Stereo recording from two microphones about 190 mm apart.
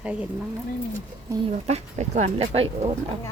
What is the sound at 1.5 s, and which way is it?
Speech, 35° right (ahead or behind).